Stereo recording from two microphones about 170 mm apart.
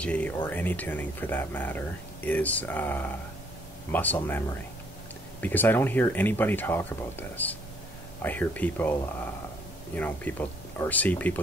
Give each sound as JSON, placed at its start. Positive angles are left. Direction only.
{"t": 0.0, "sound": "speech", "side_deg": 10}
{"t": 9.9, "sound": "speech", "side_deg": 10}